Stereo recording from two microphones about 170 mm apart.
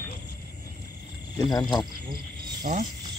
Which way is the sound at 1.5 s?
25° left (ahead or behind).